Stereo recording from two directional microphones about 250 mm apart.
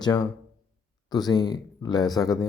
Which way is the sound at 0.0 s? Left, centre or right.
Centre.